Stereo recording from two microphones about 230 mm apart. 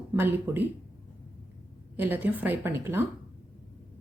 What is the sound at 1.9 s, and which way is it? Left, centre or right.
Speech, centre.